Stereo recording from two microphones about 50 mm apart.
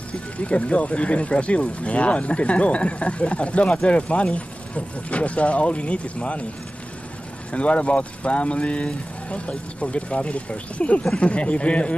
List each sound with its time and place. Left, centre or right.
0.4 s speech: left
7.5 s speech: left
9.3 s speech: centre
9.8 s speech: left